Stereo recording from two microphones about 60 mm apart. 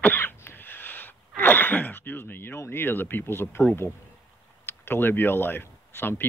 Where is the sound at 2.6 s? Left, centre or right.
Left.